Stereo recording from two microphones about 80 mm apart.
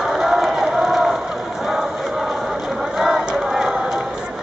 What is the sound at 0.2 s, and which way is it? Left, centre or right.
Crowd, centre.